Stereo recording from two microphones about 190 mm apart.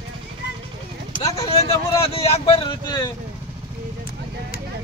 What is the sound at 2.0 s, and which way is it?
Speech, 30° left (ahead or behind).